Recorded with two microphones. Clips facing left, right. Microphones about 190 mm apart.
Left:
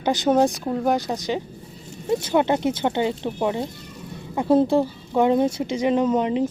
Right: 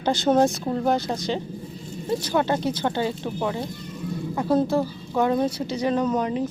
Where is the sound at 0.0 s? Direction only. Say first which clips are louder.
Left 1 dB; 15° left (ahead or behind).